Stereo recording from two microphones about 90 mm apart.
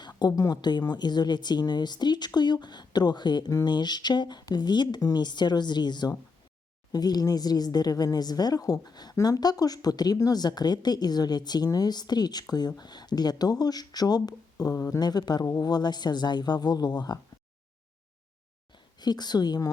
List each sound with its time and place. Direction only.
0.0 s a woman's voice: 50° left (ahead or behind)
18.9 s a woman's voice: 50° left (ahead or behind)